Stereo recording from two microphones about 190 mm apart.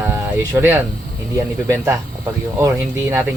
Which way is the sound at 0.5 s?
10° right (ahead or behind).